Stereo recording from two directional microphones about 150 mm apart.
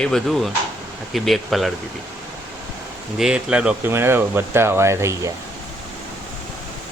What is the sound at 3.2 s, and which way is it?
Speech, 5° right (ahead or behind).